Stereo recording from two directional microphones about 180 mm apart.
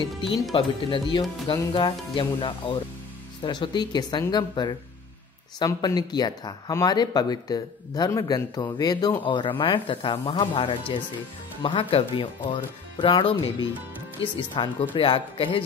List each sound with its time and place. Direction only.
0.3 s speech: 30° left (ahead or behind)